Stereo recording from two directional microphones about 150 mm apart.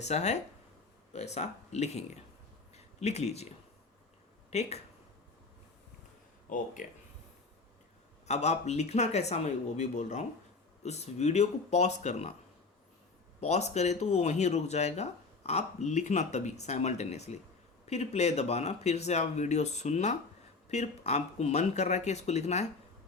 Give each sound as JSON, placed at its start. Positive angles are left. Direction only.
{"t": 0.0, "sound": "speech", "side_deg": 50}
{"t": 4.5, "sound": "speech", "side_deg": 45}
{"t": 6.5, "sound": "speech", "side_deg": 60}
{"t": 8.3, "sound": "speech", "side_deg": 50}
{"t": 13.4, "sound": "speech", "side_deg": 45}